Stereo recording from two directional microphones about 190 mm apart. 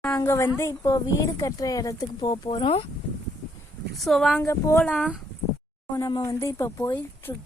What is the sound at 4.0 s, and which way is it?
Speech, centre (ahead or behind).